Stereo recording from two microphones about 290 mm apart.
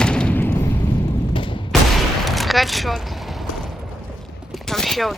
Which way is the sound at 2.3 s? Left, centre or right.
Centre.